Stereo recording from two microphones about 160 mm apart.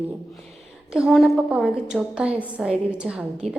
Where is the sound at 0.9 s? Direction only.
Centre (ahead or behind).